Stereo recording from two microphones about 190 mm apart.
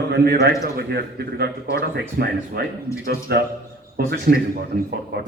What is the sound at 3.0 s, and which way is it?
Speech, 50° right (ahead or behind).